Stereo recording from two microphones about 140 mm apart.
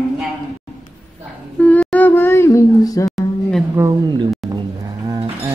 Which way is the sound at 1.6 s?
5° left (ahead or behind).